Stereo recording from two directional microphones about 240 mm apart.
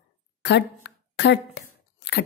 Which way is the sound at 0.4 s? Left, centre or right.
Left.